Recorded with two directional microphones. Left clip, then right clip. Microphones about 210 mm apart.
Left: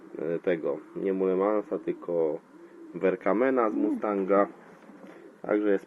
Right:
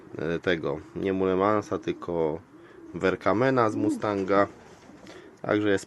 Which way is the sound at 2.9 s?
25° right (ahead or behind).